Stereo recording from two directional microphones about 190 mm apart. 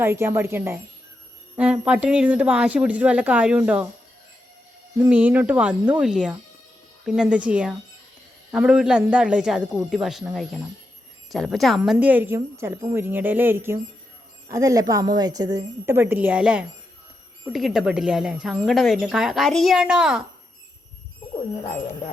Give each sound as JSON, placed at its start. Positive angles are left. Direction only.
{"t": 0.0, "sound": "a woman's voice", "side_deg": -10}
{"t": 4.9, "sound": "a woman's voice", "side_deg": -10}